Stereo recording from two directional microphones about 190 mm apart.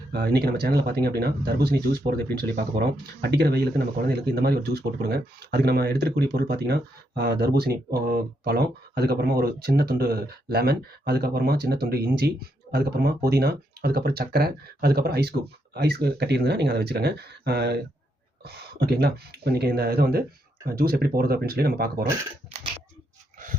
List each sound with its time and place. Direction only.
0.1 s speech: 55° right (ahead or behind)